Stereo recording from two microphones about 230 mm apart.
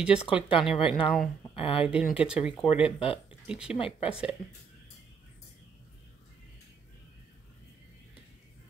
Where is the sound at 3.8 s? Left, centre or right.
Left.